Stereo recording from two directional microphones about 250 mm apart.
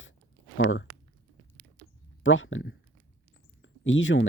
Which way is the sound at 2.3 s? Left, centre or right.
Left.